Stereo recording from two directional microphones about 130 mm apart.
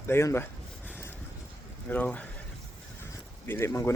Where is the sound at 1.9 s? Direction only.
10° left (ahead or behind).